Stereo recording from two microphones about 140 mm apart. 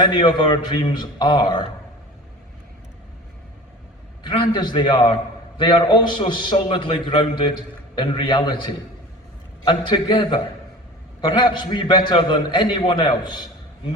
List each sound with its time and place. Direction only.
0.0 s a man's voice: 35° left (ahead or behind)
4.2 s a man's voice: 30° left (ahead or behind)
9.6 s a man's voice: 35° left (ahead or behind)